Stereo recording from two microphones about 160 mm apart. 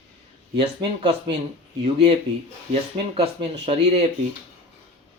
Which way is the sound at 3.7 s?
40° right (ahead or behind).